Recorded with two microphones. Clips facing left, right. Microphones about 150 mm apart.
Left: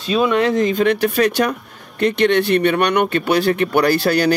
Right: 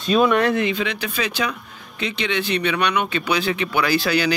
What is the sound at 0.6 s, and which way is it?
Speech, 45° left (ahead or behind).